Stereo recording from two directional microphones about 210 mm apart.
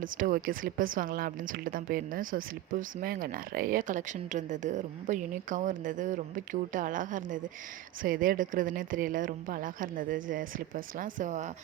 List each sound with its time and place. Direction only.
0.0 s speech: 40° right (ahead or behind)